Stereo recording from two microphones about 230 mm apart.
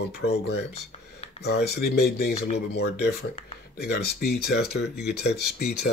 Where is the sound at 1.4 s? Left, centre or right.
Left.